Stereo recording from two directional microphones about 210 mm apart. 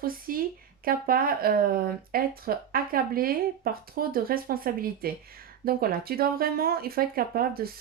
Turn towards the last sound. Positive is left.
turn(degrees=-45)  # may be behind; listen again after turning